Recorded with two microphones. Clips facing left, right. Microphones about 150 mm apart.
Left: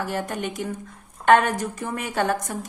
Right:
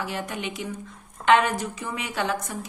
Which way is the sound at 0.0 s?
45° left (ahead or behind).